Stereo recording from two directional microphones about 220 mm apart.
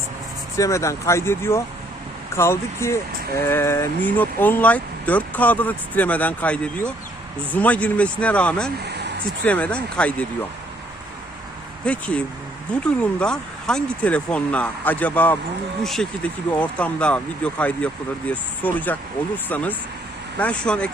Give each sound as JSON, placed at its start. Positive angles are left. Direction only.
{"t": 0.5, "sound": "speech", "side_deg": 15}
{"t": 8.8, "sound": "a sound", "side_deg": -50}
{"t": 9.4, "sound": "speech", "side_deg": 5}
{"t": 11.9, "sound": "speech", "side_deg": 5}